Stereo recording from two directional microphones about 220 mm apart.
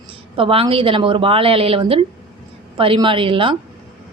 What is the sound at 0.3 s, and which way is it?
A woman's voice, 25° right (ahead or behind).